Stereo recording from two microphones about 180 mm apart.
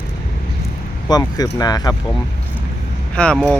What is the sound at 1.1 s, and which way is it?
Speech, 20° left (ahead or behind).